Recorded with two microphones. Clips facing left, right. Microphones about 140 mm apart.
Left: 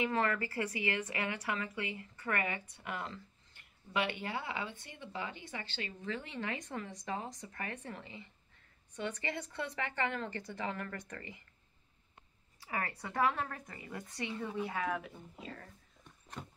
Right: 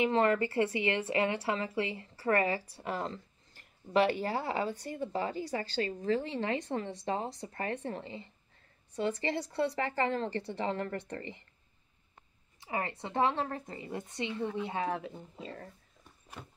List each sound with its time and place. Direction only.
0.0 s speech: 25° right (ahead or behind)
12.5 s a woman's voice: 25° right (ahead or behind)
16.0 s a sound: 5° right (ahead or behind)